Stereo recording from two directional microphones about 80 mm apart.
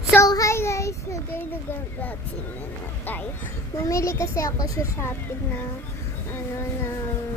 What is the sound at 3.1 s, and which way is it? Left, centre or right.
Child singing, left.